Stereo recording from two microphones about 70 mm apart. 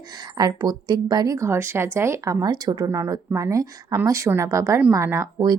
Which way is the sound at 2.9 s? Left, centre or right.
Right.